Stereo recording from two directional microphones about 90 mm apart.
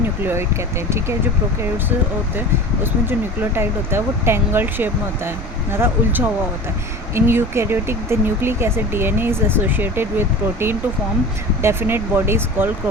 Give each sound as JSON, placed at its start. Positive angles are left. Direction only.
{"t": 0.2, "sound": "speech", "side_deg": -25}
{"t": 2.8, "sound": "speech", "side_deg": -25}